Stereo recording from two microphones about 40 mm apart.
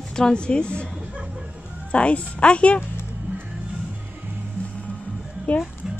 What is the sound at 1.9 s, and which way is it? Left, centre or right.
Speech, left.